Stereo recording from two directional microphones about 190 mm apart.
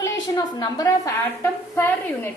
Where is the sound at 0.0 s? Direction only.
15° left (ahead or behind).